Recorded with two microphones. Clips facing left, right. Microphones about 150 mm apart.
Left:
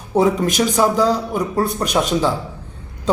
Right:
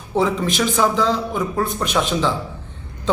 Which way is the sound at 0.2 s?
45° left (ahead or behind).